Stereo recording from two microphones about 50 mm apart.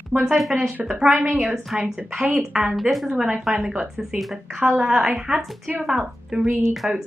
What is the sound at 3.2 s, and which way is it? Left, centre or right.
Speech, centre.